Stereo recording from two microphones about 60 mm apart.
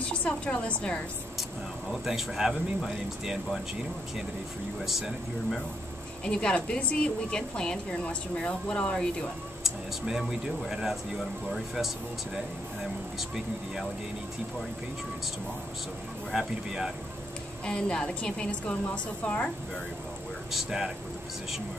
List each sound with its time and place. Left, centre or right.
0.1 s a woman's voice: centre
2.0 s speech: centre
4.8 s speech: centre
6.2 s a woman's voice: centre
9.6 s speech: centre
16.3 s speech: centre
17.6 s a woman's voice: centre
20.5 s speech: centre